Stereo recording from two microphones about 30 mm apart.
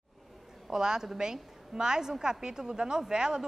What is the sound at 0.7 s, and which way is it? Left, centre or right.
A woman's voice, right.